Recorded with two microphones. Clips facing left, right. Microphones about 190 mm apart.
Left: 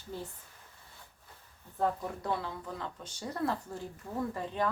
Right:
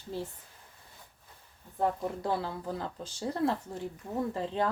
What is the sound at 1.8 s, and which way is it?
Speech, 25° right (ahead or behind).